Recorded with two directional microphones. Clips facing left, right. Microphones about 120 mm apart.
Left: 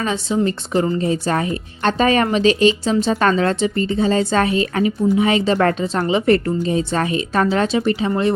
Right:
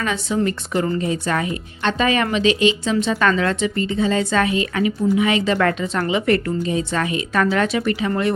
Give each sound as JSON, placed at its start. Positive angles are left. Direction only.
{"t": 0.0, "sound": "speech", "side_deg": 30}